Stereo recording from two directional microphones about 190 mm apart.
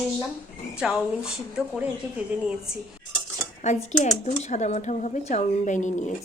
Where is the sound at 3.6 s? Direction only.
40° left (ahead or behind).